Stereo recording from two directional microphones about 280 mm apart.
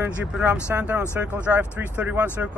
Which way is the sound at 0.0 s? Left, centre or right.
Centre.